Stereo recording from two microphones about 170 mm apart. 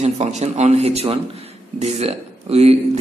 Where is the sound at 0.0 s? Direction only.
40° right (ahead or behind).